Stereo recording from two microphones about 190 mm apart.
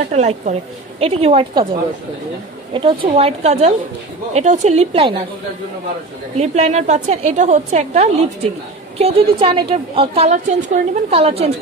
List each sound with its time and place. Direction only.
0.1 s a woman's voice: 35° right (ahead or behind)
2.7 s a woman's voice: 30° right (ahead or behind)
6.3 s a woman's voice: 35° right (ahead or behind)